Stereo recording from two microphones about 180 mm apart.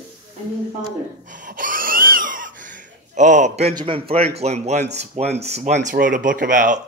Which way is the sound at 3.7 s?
30° right (ahead or behind).